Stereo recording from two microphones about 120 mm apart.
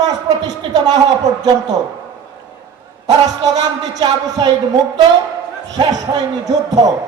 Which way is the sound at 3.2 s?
30° right (ahead or behind).